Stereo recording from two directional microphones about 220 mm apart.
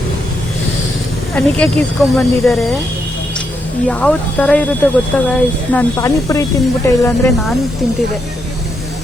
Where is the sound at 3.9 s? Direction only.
5° left (ahead or behind).